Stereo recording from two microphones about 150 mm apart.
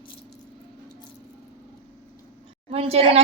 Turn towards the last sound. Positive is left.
turn(degrees=-45)  # may be behind; listen again after turning